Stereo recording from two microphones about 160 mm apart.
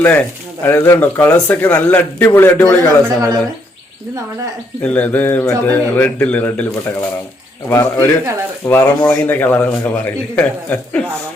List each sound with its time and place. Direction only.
0.0 s speech: 10° left (ahead or behind)
3.0 s speech: 20° right (ahead or behind)
4.8 s speech: 10° left (ahead or behind)
7.7 s speech: 20° left (ahead or behind)